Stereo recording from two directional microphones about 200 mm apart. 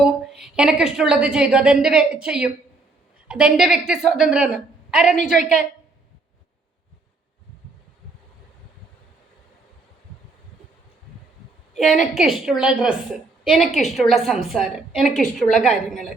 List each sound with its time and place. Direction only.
0.0 s a woman's voice: centre (ahead or behind)
5.4 s a woman's voice: 40° left (ahead or behind)
11.7 s a woman's voice: centre (ahead or behind)